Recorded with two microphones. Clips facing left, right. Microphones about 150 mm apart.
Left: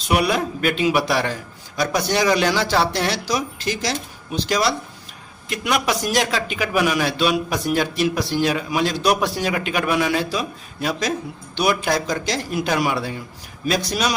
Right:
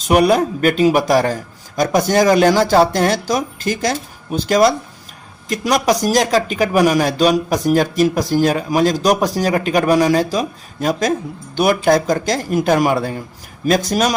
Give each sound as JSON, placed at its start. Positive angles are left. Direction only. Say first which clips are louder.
{"t": 0.1, "sound": "a man's voice", "louder": "right 7 dB", "side_deg": -45}